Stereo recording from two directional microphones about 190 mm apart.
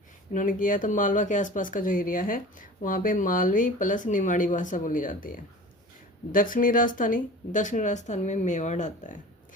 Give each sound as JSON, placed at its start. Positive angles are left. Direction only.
{"t": 0.3, "sound": "speech", "side_deg": 45}